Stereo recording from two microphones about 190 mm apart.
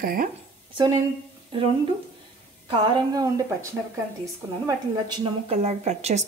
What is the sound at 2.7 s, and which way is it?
A woman's voice, 20° right (ahead or behind).